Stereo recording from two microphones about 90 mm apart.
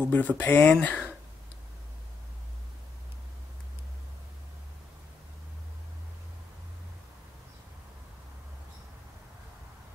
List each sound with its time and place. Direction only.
0.0 s speech: 20° left (ahead or behind)